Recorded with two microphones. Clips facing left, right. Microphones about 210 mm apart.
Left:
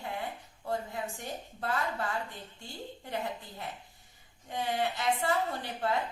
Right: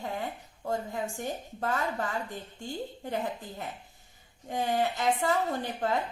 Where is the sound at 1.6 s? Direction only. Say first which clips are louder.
Right 3 dB; 40° right (ahead or behind).